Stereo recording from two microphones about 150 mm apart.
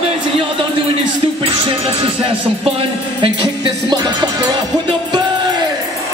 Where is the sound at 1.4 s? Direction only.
35° right (ahead or behind).